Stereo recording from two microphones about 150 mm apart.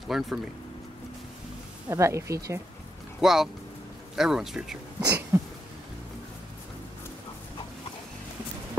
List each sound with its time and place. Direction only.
0.1 s speech: centre (ahead or behind)
1.9 s speech: 20° right (ahead or behind)
3.2 s speech: centre (ahead or behind)
5.0 s a sound: 15° right (ahead or behind)